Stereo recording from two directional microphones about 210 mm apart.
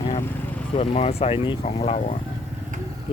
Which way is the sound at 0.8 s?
30° left (ahead or behind).